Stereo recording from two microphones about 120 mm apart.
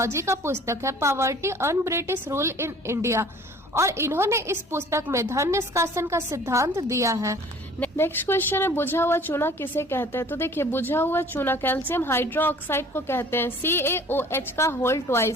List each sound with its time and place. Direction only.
0.0 s a woman's voice: 25° right (ahead or behind)
7.8 s a woman's voice: 20° left (ahead or behind)